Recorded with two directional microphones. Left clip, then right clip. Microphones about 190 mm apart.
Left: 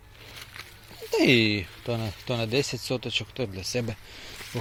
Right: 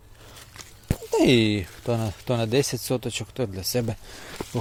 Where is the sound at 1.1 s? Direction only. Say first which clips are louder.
Right 1 dB; 20° right (ahead or behind).